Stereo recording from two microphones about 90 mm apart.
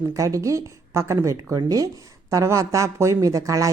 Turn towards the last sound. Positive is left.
turn(degrees=-35)  # may be behind; listen again after turning